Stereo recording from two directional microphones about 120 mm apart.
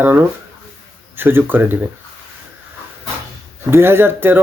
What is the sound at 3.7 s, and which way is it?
Speech, 20° right (ahead or behind).